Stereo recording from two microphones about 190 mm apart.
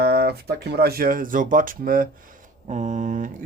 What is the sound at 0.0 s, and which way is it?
Speech, 55° right (ahead or behind).